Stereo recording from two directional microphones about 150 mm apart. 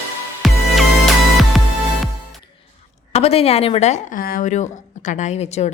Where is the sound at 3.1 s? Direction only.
40° left (ahead or behind).